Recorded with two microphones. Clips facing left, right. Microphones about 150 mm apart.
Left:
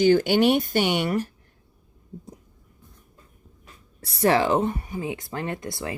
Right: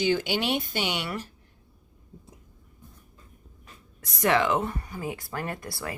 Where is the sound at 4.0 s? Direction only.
30° left (ahead or behind).